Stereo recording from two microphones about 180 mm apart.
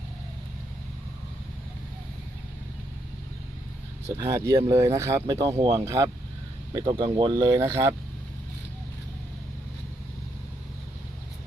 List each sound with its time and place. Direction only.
4.2 s speech: 20° right (ahead or behind)
7.6 s speech: 15° right (ahead or behind)